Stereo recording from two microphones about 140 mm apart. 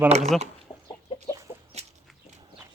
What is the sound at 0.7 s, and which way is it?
Chicken, 40° left (ahead or behind).